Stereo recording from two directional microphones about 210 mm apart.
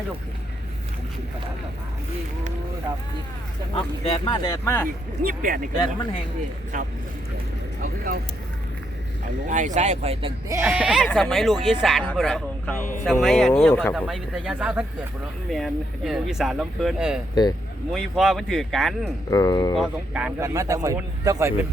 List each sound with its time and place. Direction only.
4.0 s speech: 25° left (ahead or behind)
5.2 s speech: 40° right (ahead or behind)
6.7 s speech: 40° right (ahead or behind)
9.5 s speech: 35° right (ahead or behind)
10.5 s speech: 10° right (ahead or behind)
19.3 s speech: 20° left (ahead or behind)
19.7 s speech: 5° right (ahead or behind)